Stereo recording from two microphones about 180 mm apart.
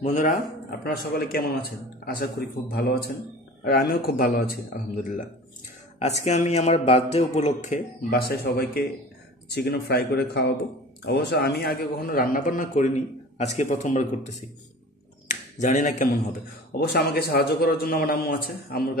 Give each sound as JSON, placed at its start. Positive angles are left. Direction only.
{"t": 0.0, "sound": "speech", "side_deg": 45}
{"t": 4.7, "sound": "speech", "side_deg": 45}
{"t": 5.9, "sound": "speech", "side_deg": 35}
{"t": 8.1, "sound": "speech", "side_deg": 60}